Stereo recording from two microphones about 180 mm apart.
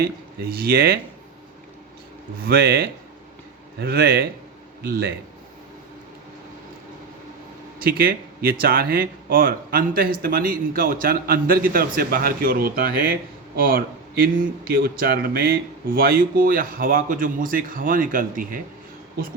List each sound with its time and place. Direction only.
0.0 s speech: 55° right (ahead or behind)
2.4 s speech: 60° right (ahead or behind)
7.8 s speech: 55° right (ahead or behind)